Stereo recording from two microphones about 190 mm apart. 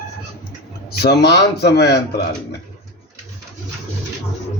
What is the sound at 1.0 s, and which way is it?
Speech, 60° left (ahead or behind).